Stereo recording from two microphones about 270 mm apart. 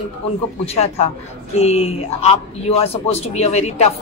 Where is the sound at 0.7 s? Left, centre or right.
Left.